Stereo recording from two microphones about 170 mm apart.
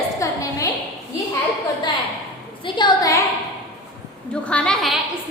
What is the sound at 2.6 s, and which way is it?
Speech, 25° left (ahead or behind).